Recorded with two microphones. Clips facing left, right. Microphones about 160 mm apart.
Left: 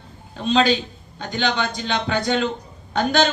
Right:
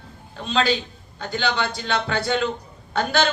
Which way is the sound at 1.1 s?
20° left (ahead or behind).